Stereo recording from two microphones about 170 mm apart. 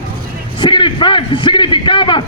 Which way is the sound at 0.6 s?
30° left (ahead or behind).